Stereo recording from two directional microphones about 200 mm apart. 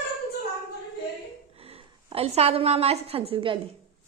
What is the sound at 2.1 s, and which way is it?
A woman's voice, 30° right (ahead or behind).